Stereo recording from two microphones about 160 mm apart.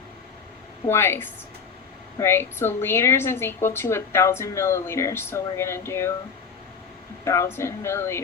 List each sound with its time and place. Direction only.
0.9 s a woman's voice: 15° left (ahead or behind)
7.3 s a woman's voice: 15° left (ahead or behind)